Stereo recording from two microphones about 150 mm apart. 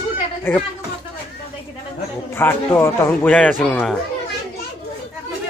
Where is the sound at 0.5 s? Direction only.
15° left (ahead or behind).